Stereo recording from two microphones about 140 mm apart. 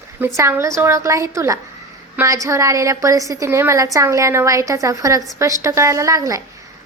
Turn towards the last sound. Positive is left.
turn(degrees=-25)  # may be behind; listen again after turning